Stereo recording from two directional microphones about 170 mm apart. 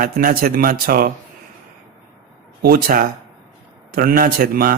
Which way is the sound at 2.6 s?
60° right (ahead or behind).